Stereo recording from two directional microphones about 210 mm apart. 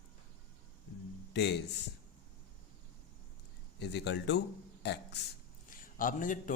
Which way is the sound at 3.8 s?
55° left (ahead or behind).